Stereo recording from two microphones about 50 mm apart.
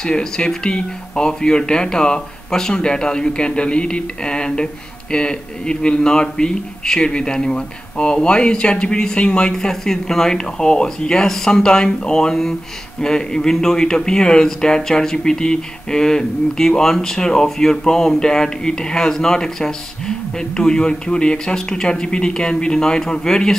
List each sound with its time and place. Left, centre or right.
0.0 s speech: centre